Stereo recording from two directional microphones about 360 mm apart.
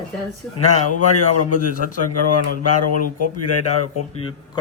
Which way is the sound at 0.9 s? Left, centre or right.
Left.